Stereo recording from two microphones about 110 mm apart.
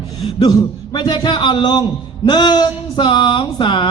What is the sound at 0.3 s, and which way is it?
Speech, 40° left (ahead or behind).